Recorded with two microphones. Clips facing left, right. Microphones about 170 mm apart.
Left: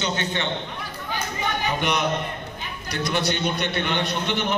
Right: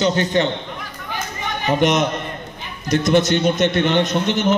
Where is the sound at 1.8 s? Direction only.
45° right (ahead or behind).